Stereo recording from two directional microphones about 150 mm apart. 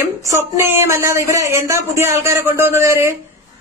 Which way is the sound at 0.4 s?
15° right (ahead or behind).